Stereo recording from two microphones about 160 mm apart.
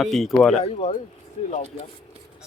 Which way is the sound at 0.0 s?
Centre (ahead or behind).